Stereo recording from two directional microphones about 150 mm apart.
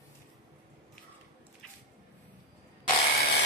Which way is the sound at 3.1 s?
90° left.